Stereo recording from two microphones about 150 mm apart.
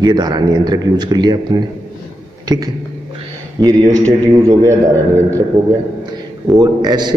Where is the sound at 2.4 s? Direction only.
25° right (ahead or behind).